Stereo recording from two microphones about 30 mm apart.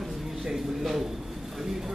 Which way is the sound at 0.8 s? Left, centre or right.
Centre.